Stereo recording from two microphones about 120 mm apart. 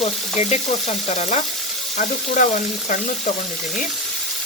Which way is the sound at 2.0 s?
90° left.